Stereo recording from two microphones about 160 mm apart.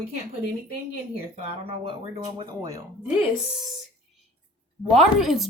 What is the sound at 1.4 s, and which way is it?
Speech, 35° right (ahead or behind).